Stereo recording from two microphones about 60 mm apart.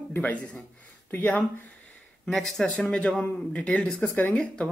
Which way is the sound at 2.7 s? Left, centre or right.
Left.